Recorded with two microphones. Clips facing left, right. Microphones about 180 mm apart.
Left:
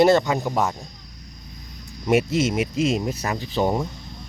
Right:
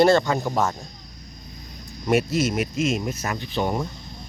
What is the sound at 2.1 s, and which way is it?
Speech, 25° left (ahead or behind).